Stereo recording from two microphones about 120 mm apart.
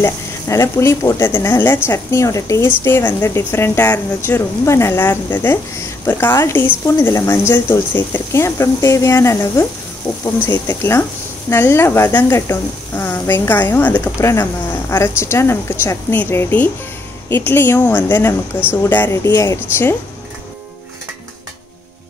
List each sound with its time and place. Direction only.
0.0 s a woman's voice: 25° left (ahead or behind)